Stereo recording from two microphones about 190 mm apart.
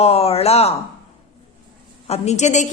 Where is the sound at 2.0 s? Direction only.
35° left (ahead or behind).